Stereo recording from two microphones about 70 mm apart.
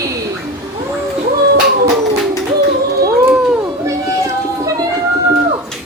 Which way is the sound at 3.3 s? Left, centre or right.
Centre.